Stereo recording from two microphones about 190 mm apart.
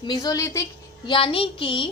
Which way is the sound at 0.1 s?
20° left (ahead or behind).